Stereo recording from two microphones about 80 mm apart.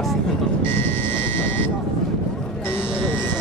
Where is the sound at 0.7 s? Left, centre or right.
Left.